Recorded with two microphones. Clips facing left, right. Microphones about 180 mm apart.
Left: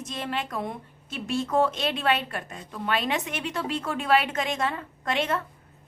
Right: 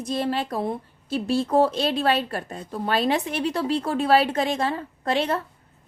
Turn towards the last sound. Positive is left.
turn(degrees=-35)  # may be behind; listen again after turning